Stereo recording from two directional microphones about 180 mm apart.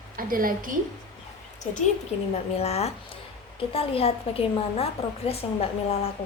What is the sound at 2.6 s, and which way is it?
A woman's voice, 35° left (ahead or behind).